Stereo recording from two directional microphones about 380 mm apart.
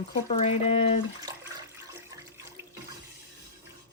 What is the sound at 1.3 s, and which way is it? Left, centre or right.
Water, centre.